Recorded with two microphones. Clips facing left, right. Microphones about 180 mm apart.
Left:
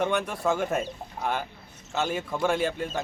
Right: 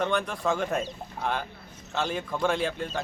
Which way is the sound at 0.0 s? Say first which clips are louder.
Left 1 dB; 5° left (ahead or behind).